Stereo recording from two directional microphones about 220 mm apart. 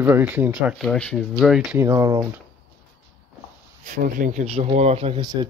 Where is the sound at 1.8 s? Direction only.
15° right (ahead or behind).